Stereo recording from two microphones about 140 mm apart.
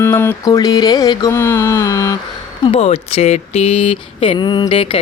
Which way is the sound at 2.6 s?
45° left (ahead or behind).